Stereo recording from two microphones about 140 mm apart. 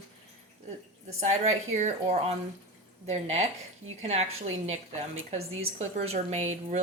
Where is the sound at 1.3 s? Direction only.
55° right (ahead or behind).